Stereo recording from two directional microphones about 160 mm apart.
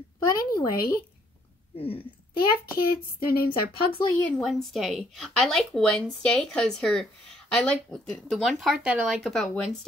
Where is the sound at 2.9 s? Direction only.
70° left (ahead or behind).